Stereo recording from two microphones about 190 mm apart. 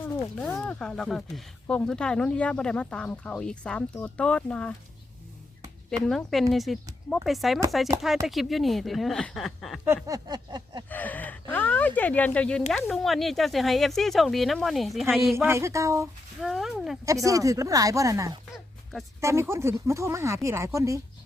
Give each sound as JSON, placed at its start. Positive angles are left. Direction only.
{"t": 0.3, "sound": "speech", "side_deg": 5}
{"t": 6.0, "sound": "speech", "side_deg": 0}
{"t": 9.8, "sound": "a sound", "side_deg": -15}
{"t": 10.8, "sound": "speech", "side_deg": 10}
{"t": 15.4, "sound": "speech", "side_deg": -15}
{"t": 16.4, "sound": "speech", "side_deg": 0}
{"t": 17.2, "sound": "speech", "side_deg": -15}